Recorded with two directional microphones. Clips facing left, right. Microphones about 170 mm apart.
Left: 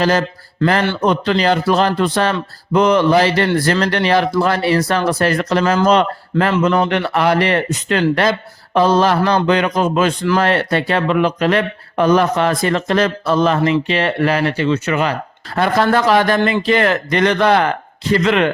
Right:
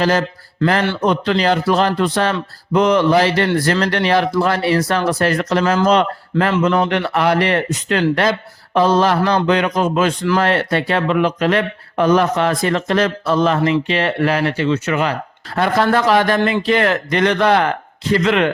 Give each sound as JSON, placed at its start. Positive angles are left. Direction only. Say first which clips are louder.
{"t": 0.0, "sound": "speech", "louder": "left 1 dB", "side_deg": 35}